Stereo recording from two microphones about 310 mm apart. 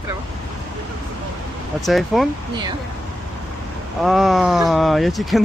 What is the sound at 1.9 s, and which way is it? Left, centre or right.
Speech, centre.